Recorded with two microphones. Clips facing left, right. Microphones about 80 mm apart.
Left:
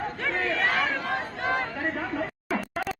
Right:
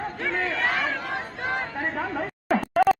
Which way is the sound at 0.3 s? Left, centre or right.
Centre.